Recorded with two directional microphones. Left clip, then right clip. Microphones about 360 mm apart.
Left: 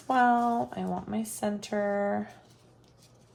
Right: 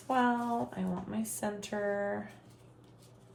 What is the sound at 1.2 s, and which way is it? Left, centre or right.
Speech, left.